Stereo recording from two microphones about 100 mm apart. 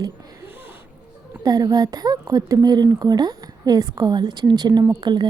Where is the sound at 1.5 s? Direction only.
40° right (ahead or behind).